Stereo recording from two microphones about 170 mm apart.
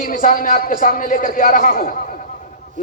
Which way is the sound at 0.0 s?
50° left (ahead or behind).